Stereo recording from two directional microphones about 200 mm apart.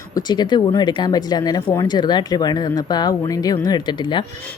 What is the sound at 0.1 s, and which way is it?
Speech, 20° left (ahead or behind).